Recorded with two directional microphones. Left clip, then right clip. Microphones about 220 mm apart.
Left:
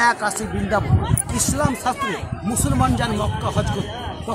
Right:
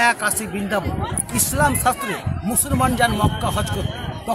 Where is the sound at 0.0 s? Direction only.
45° right (ahead or behind).